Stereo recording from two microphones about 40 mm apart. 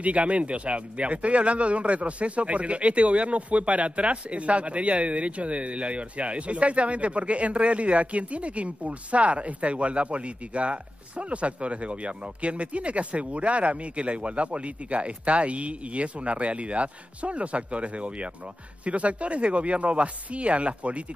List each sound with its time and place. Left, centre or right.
0.0 s a man's voice: right